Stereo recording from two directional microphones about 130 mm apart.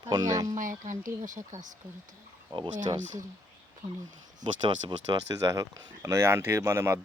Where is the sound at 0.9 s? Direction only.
80° right.